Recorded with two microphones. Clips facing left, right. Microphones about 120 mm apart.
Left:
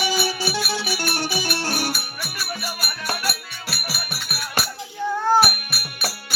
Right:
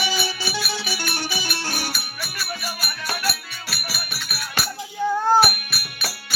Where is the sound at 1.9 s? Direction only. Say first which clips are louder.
Left 2 dB; 10° left (ahead or behind).